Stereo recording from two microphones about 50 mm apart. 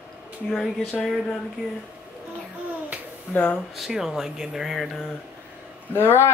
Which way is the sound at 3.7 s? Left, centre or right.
Centre.